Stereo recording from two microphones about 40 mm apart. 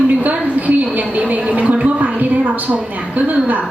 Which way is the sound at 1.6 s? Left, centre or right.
Right.